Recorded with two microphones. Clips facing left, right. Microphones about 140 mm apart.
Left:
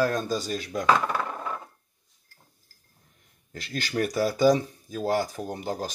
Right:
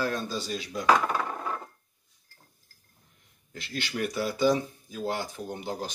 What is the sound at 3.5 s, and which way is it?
Speech, 40° left (ahead or behind).